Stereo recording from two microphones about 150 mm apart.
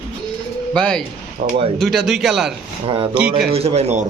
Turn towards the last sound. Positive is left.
turn(degrees=-45)  # may be behind; listen again after turning